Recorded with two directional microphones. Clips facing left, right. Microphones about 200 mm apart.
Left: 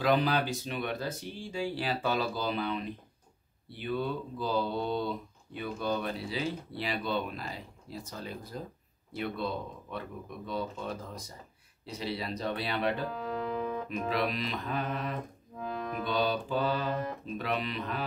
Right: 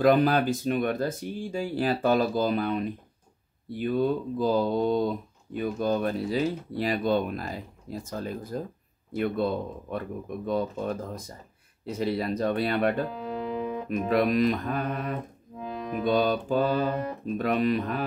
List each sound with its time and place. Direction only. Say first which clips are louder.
0.0 s speech: right 6 dB; 50° right (ahead or behind)
13.1 s music: right 2 dB; 25° right (ahead or behind)
13.8 s speech: right 12 dB; 50° right (ahead or behind)
15.5 s music: right 2 dB; 20° right (ahead or behind)
16.1 s speech: right 7 dB; 45° right (ahead or behind)